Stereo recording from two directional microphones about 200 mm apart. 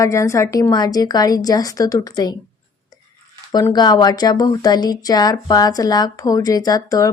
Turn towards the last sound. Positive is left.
turn(degrees=15)  # may be behind; listen again after turning